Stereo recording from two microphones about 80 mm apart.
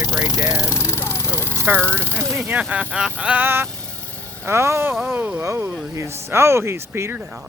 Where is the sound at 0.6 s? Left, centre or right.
Left.